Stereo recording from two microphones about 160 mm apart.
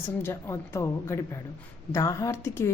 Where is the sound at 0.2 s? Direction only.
15° left (ahead or behind).